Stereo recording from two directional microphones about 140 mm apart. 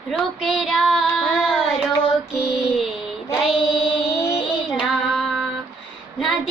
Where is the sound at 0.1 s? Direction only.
Centre (ahead or behind).